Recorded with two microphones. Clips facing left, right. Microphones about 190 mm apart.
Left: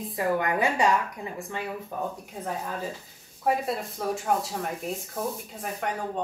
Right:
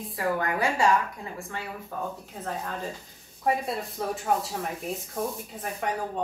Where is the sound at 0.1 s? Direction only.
20° left (ahead or behind).